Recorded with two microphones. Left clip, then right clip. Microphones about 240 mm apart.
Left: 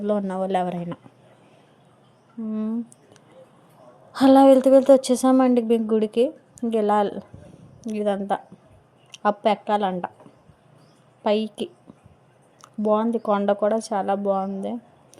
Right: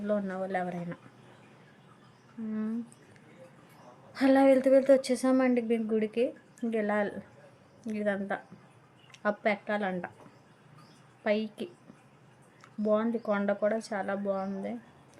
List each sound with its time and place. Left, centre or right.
0.0 s a woman's voice: left
4.1 s a woman's voice: left
11.2 s a woman's voice: left